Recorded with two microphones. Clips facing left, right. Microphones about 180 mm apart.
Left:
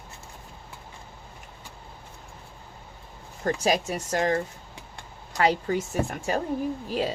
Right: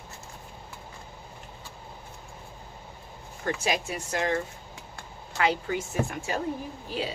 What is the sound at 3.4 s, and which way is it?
Speech, 40° left (ahead or behind).